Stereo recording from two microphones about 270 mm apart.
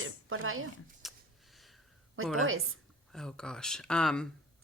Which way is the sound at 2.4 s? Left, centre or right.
Right.